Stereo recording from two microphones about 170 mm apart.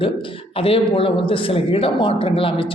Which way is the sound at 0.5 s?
35° left (ahead or behind).